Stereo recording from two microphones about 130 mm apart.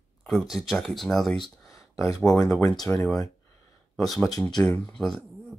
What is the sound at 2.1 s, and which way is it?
Speech, 5° left (ahead or behind).